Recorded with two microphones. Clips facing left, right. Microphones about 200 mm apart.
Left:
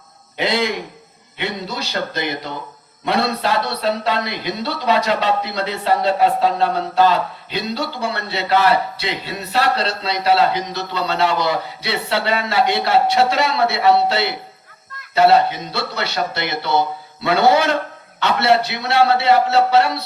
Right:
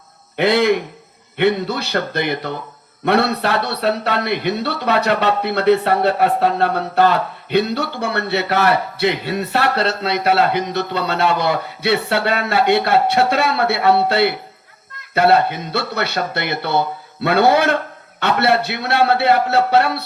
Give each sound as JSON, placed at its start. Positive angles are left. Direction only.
{"t": 0.3, "sound": "a man's voice", "side_deg": -55}